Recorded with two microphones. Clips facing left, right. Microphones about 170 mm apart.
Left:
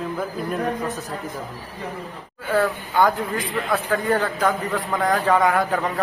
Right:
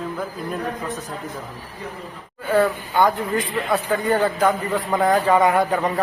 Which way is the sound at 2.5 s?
Centre (ahead or behind).